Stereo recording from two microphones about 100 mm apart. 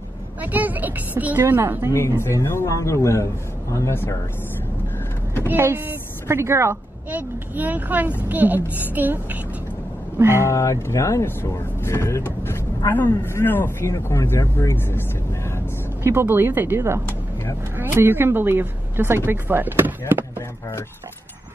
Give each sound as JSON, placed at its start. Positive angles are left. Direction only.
{"t": 0.4, "sound": "a woman's voice", "side_deg": -15}
{"t": 1.9, "sound": "a man's voice", "side_deg": 25}
{"t": 5.5, "sound": "a woman's voice", "side_deg": -20}
{"t": 10.4, "sound": "speech", "side_deg": 30}
{"t": 16.0, "sound": "a woman's voice", "side_deg": -25}